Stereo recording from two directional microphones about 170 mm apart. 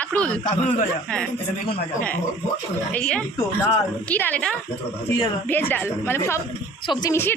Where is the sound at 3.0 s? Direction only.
5° left (ahead or behind).